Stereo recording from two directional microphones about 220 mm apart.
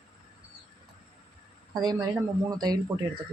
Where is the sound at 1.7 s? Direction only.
20° right (ahead or behind).